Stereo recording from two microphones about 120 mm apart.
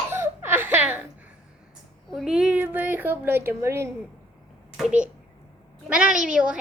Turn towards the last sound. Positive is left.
turn(degrees=-10)  # may be behind; listen again after turning